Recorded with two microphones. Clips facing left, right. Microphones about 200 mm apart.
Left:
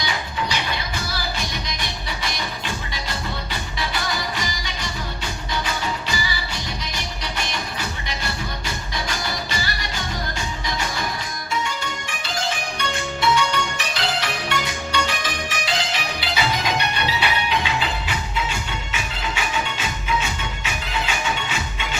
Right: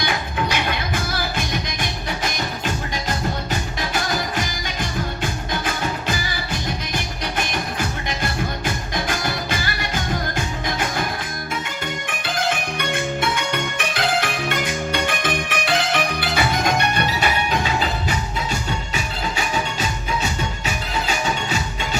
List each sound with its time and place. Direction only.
0.0 s music: 55° right (ahead or behind)